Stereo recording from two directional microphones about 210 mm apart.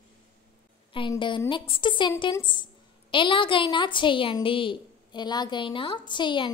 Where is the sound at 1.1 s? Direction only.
20° left (ahead or behind).